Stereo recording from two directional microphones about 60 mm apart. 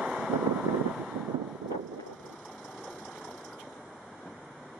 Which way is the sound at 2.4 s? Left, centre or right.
Centre.